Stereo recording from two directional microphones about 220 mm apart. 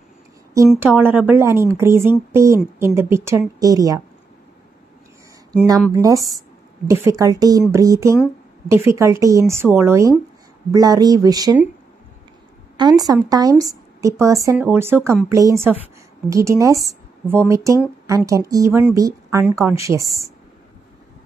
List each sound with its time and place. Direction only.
0.7 s a woman's voice: 5° right (ahead or behind)
5.9 s a woman's voice: 15° right (ahead or behind)
12.7 s a woman's voice: 20° right (ahead or behind)